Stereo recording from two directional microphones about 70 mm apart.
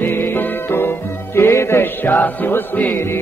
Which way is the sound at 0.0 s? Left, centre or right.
Left.